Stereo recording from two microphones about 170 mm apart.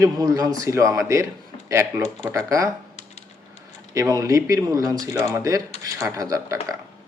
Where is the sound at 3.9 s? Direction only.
20° right (ahead or behind).